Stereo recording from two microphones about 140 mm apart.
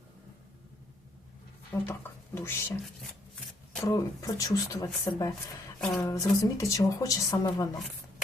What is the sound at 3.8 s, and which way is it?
Speech, 25° left (ahead or behind).